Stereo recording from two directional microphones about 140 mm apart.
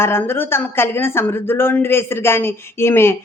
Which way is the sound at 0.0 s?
15° left (ahead or behind).